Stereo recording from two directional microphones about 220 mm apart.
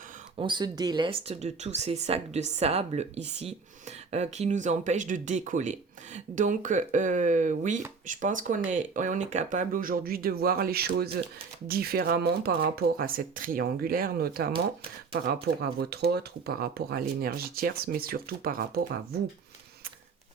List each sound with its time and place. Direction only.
0.3 s speech: 20° right (ahead or behind); by 19.2 s 45° right (ahead or behind)